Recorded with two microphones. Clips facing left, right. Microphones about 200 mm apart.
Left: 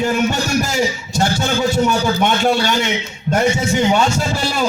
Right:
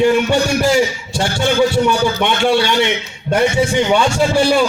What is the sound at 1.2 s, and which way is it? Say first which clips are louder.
A man's voice: right 3 dB; 40° left (ahead or behind).